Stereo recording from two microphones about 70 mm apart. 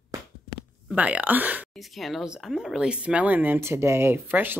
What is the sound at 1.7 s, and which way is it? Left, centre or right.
Speech, centre.